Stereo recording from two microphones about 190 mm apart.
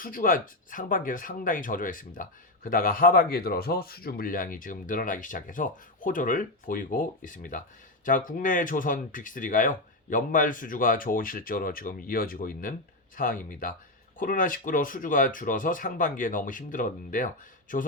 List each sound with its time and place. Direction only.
0.0 s speech: 45° left (ahead or behind)